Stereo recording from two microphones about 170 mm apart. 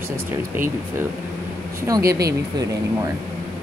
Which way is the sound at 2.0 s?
70° right (ahead or behind).